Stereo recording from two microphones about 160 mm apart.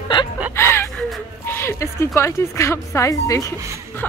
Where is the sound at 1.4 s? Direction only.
15° left (ahead or behind).